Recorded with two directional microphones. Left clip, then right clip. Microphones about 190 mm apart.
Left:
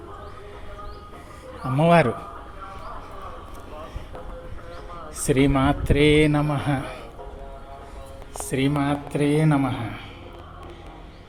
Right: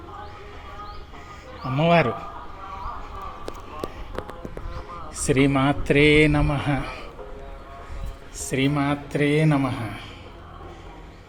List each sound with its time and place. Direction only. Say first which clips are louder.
1.7 s a man's voice: left 1 dB; 15° left (ahead or behind)
5.2 s a man's voice: even; centre (ahead or behind)
8.4 s a man's voice: even; centre (ahead or behind)